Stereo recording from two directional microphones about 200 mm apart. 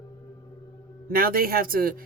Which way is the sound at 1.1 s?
45° right (ahead or behind).